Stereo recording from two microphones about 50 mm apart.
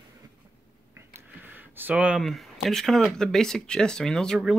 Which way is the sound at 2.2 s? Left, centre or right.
Centre.